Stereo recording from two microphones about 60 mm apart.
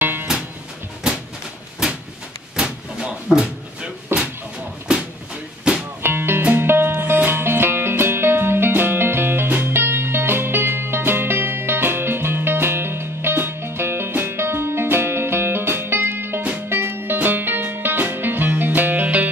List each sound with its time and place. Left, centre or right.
0.0 s music: right
1.8 s a sound: centre
6.0 s music: right